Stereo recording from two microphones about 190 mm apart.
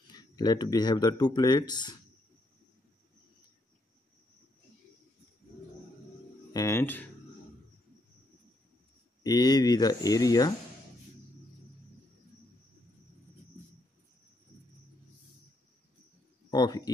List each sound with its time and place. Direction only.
0.1 s speech: 20° left (ahead or behind)
6.5 s speech: 15° left (ahead or behind)
9.2 s speech: 20° left (ahead or behind)
16.4 s a man's voice: 20° left (ahead or behind)